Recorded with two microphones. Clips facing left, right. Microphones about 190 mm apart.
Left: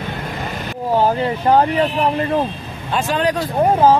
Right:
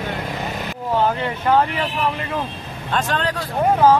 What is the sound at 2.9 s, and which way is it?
Speech, 10° left (ahead or behind).